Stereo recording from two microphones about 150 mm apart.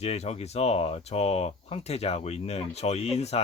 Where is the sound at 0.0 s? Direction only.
45° left (ahead or behind).